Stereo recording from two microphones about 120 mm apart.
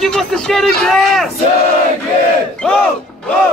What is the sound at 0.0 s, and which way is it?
A man's voice, 5° left (ahead or behind).